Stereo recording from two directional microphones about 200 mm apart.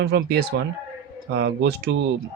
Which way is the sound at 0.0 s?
55° right (ahead or behind).